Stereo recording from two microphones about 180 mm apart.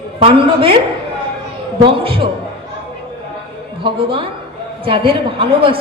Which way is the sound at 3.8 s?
30° right (ahead or behind).